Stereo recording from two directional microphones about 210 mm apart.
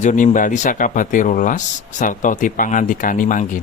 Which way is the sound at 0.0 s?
35° left (ahead or behind).